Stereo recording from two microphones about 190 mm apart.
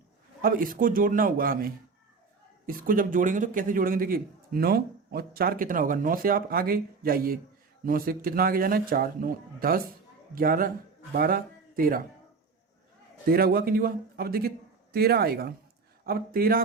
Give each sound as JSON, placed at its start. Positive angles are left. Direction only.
{"t": 0.4, "sound": "a man's voice", "side_deg": -45}
{"t": 13.2, "sound": "a man's voice", "side_deg": -50}